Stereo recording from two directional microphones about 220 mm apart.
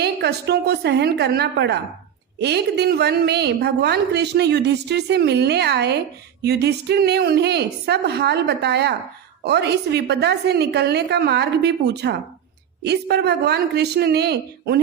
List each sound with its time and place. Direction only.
0.0 s a woman's voice: 50° right (ahead or behind)